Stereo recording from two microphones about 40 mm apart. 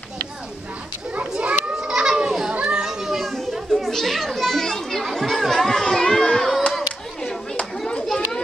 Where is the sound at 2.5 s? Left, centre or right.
Right.